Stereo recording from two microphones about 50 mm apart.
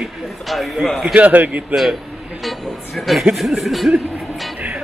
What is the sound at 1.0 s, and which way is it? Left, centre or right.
Speech, right.